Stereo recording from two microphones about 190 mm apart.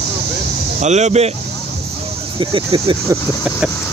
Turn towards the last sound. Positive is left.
turn(degrees=-25)  # may be behind; listen again after turning